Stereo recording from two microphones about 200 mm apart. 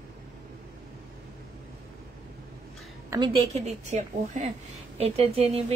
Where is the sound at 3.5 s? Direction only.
35° right (ahead or behind).